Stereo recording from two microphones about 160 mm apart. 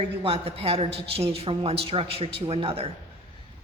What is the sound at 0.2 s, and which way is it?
A man's voice, 40° right (ahead or behind).